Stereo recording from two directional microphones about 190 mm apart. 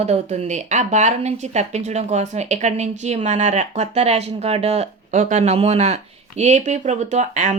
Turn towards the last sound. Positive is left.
turn(degrees=-40)  # may be behind; listen again after turning